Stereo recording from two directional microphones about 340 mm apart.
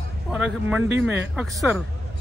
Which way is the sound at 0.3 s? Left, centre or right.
Centre.